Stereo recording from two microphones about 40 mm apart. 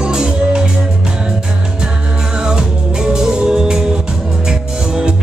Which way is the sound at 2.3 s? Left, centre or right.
Centre.